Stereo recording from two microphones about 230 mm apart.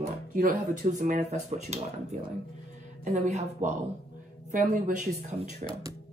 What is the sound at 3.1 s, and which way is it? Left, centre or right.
Speech, right.